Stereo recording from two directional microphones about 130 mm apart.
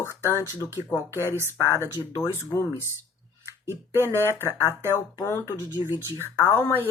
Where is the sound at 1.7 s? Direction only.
20° left (ahead or behind).